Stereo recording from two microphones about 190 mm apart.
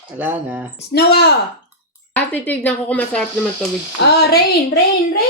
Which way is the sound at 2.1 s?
10° left (ahead or behind).